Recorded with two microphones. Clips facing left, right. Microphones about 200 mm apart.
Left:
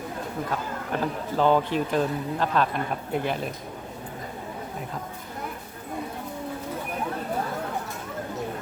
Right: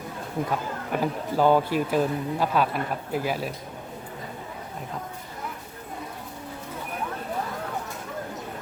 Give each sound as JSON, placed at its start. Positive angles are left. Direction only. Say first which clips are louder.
{"t": 0.9, "sound": "speech", "louder": "right 1 dB", "side_deg": -10}